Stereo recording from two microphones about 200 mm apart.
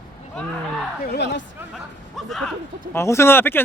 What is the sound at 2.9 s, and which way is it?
Speech, 15° left (ahead or behind).